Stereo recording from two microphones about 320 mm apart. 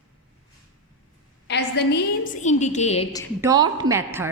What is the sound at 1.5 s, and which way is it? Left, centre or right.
A woman's voice, left.